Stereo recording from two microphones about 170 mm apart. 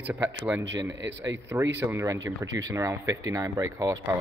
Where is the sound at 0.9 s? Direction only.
90° right.